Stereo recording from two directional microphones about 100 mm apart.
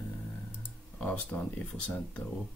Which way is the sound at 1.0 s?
15° left (ahead or behind).